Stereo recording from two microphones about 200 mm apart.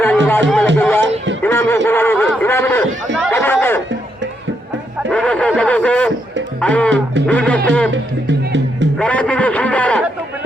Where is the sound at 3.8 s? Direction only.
65° right (ahead or behind).